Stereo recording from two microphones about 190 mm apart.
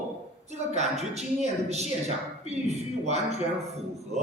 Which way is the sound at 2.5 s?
35° right (ahead or behind).